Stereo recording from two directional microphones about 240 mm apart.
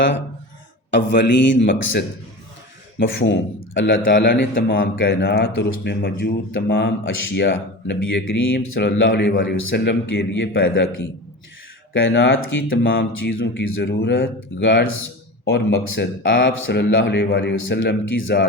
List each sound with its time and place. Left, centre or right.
0.9 s speech: left
3.2 s speech: left
4.8 s speech: left
9.0 s speech: left
11.9 s speech: left
16.6 s speech: left